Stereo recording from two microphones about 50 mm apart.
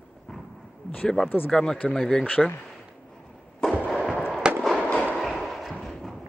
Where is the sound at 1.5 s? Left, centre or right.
Centre.